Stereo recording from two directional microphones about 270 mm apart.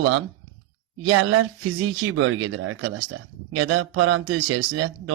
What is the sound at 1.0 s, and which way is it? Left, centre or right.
Speech, right.